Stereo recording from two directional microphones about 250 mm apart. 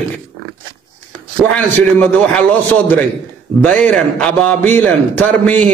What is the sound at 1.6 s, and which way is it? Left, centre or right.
A man's voice, centre.